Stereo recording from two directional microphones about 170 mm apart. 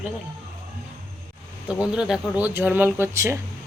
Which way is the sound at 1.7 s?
5° right (ahead or behind).